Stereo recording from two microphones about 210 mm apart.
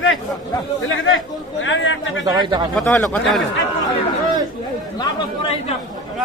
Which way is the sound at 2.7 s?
5° left (ahead or behind).